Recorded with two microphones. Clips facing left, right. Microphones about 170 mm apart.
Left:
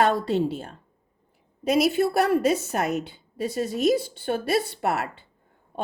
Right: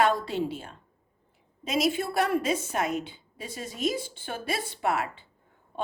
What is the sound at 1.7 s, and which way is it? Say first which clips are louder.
A woman's voice: left 6 dB; 60° left (ahead or behind).